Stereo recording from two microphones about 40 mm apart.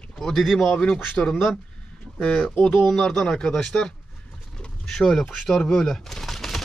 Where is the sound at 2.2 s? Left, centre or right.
Left.